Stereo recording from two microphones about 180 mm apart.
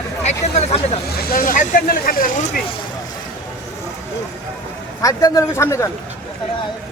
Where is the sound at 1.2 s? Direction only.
55° left (ahead or behind).